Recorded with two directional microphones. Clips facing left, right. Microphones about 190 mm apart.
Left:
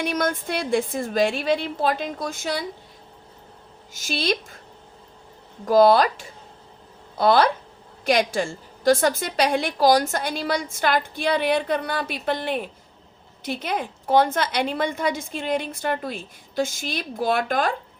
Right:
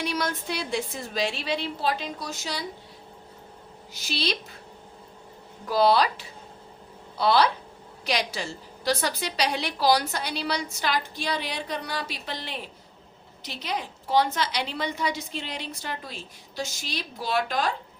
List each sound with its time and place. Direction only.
0.0 s a woman's voice: 50° left (ahead or behind)
3.9 s a woman's voice: 50° left (ahead or behind)
5.6 s a woman's voice: 50° left (ahead or behind)